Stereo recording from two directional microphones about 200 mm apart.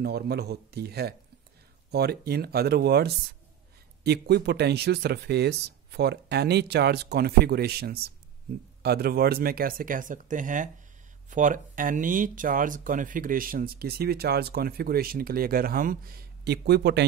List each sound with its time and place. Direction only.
0.0 s speech: 55° right (ahead or behind)